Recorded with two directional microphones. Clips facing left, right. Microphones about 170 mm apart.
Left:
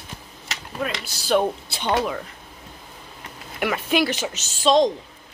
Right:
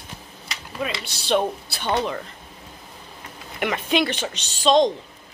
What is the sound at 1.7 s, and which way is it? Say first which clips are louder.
Speech: left 1 dB; 20° left (ahead or behind).